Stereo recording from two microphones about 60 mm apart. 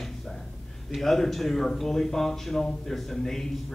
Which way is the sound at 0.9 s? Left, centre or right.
Centre.